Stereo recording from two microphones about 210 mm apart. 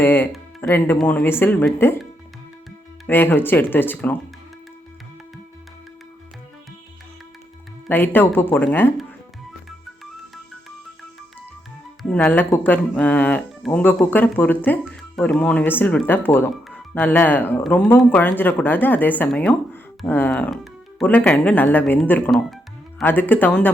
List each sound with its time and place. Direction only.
0.0 s speech: 10° left (ahead or behind)
3.1 s speech: 10° left (ahead or behind)
7.9 s speech: 10° left (ahead or behind)
9.6 s music: centre (ahead or behind)
12.0 s speech: 5° left (ahead or behind)